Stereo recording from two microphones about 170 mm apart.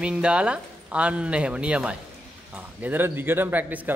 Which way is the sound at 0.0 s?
5° right (ahead or behind).